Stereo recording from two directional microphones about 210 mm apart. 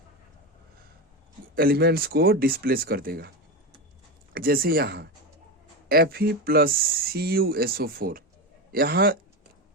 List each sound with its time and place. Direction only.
1.5 s speech: 45° right (ahead or behind)
4.4 s speech: 45° right (ahead or behind)